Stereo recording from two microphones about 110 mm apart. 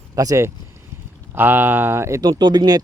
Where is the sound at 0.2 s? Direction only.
30° right (ahead or behind).